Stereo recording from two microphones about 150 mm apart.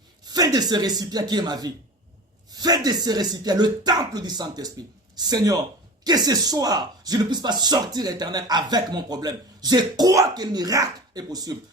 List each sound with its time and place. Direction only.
0.3 s speech: 25° right (ahead or behind)